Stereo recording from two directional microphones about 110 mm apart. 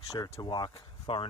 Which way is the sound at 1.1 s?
60° left (ahead or behind).